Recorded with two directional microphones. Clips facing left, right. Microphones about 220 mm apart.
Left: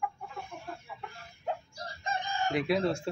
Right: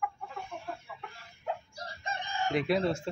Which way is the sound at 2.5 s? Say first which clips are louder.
Even; centre (ahead or behind).